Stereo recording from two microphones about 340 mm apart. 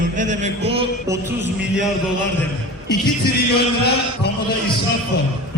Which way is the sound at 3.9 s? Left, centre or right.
Left.